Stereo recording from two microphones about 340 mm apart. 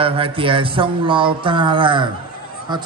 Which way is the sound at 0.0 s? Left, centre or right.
Centre.